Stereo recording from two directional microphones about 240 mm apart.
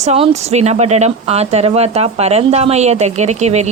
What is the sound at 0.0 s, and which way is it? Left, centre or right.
Speech, right.